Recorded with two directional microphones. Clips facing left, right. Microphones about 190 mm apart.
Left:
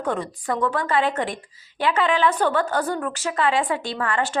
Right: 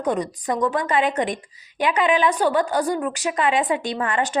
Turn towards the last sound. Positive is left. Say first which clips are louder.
# right 2 dB
turn(degrees=-20)  # may be behind; listen again after turning